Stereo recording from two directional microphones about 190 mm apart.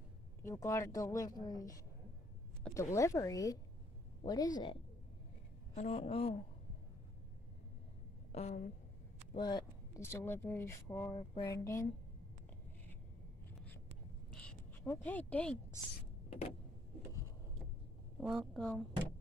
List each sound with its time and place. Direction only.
0.4 s speech: 15° left (ahead or behind)
4.2 s a sound: 20° left (ahead or behind)
5.8 s speech: 35° left (ahead or behind)
8.3 s a woman's voice: 35° left (ahead or behind)
9.3 s speech: 25° left (ahead or behind)
11.1 s a sound: 25° left (ahead or behind)
14.3 s a sound: 5° left (ahead or behind)
16.3 s vehicle: 35° left (ahead or behind)
18.2 s speech: 5° right (ahead or behind)